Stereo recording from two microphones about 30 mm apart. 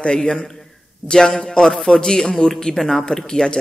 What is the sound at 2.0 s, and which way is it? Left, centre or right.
Speech, centre.